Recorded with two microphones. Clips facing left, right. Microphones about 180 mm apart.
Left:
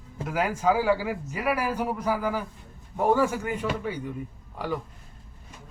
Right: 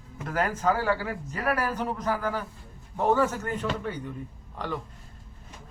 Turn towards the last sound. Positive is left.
turn(degrees=10)  # may be behind; listen again after turning